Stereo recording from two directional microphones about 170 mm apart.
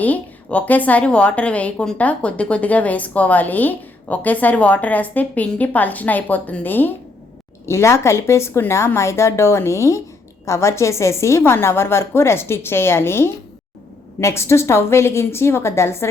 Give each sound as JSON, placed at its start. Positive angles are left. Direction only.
{"t": 0.0, "sound": "a woman's voice", "side_deg": 10}